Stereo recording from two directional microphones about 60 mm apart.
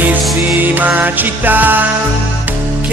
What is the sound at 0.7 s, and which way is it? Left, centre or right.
Music, right.